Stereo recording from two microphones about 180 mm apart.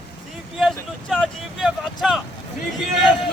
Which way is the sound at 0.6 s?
Centre (ahead or behind).